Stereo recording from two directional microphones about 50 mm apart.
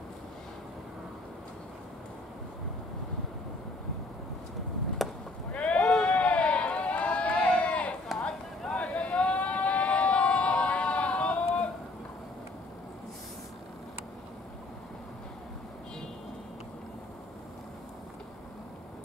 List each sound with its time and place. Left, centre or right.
5.0 s chop: centre
5.5 s horse: left
5.8 s sheep: centre
6.1 s a sound: left